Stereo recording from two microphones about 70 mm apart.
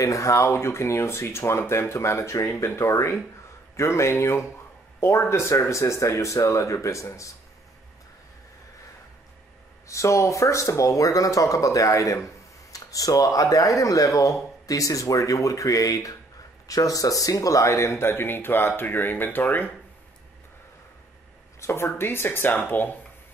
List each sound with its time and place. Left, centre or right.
0.0 s speech: left
9.8 s speech: left
21.5 s speech: left